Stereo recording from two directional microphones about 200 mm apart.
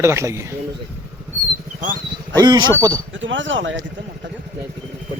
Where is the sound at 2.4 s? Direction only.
20° right (ahead or behind).